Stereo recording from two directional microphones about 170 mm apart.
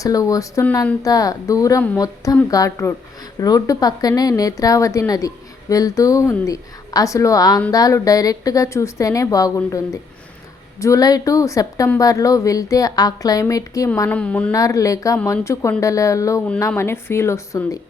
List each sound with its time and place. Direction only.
0.0 s a woman's voice: 20° left (ahead or behind)
14.2 s speech: 5° left (ahead or behind)
14.5 s a woman's voice: 20° left (ahead or behind)